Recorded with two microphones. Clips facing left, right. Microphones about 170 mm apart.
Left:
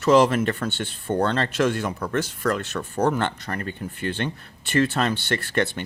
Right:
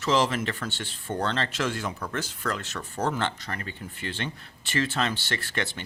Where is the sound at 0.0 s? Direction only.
55° left (ahead or behind).